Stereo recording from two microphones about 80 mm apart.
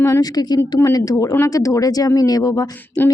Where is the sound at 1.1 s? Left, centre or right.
Left.